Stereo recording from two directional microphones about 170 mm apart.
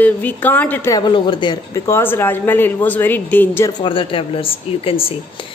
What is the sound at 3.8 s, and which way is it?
Speech, 30° left (ahead or behind).